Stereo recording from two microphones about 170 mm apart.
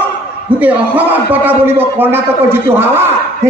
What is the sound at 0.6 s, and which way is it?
A man's voice, 10° right (ahead or behind).